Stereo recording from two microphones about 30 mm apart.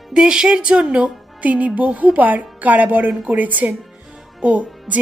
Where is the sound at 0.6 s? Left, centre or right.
Right.